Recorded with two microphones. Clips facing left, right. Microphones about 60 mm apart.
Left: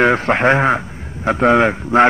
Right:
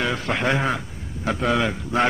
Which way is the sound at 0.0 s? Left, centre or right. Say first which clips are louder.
Left 10 dB; left.